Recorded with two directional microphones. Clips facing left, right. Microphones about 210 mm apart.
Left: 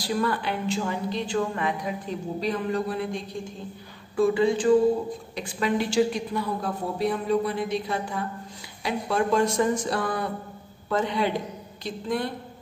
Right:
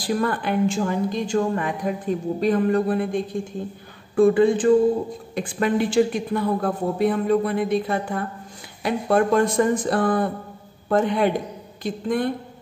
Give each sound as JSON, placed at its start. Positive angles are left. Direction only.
{"t": 0.0, "sound": "a woman's voice", "side_deg": -50}